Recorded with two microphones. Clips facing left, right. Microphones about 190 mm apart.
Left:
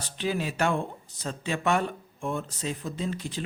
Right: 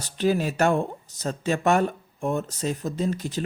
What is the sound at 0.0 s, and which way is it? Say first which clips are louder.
Speech: right 6 dB; 45° right (ahead or behind).